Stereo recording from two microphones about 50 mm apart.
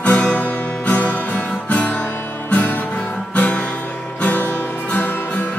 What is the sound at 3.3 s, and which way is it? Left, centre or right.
Guitar, left.